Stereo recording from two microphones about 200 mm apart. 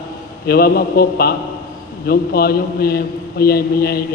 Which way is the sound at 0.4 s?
50° left (ahead or behind).